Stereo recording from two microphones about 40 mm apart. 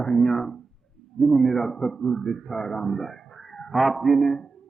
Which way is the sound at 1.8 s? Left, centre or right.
Centre.